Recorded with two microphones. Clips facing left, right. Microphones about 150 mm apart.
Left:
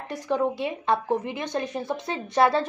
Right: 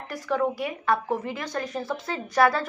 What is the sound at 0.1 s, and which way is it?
A woman's voice, 20° left (ahead or behind).